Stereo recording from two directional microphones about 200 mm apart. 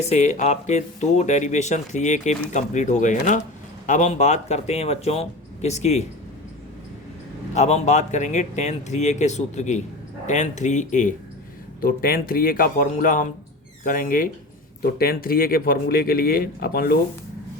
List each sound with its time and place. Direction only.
0.1 s speech: 35° left (ahead or behind)
7.5 s speech: 35° left (ahead or behind); by 17.0 s 50° left (ahead or behind)